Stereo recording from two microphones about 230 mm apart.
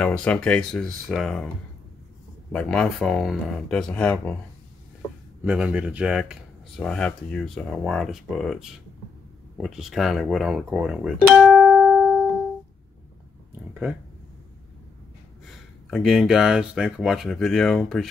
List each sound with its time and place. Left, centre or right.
0.0 s speech: centre
2.5 s speech: centre
5.4 s speech: centre
13.8 s speech: centre
15.9 s speech: centre